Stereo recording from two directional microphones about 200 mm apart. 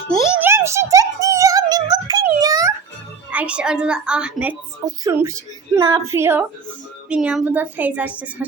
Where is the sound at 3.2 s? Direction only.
5° right (ahead or behind).